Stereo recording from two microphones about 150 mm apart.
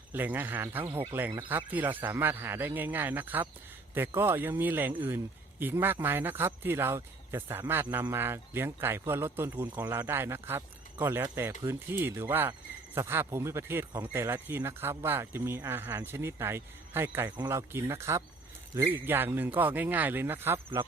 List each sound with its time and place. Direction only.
0.1 s speech: 10° right (ahead or behind)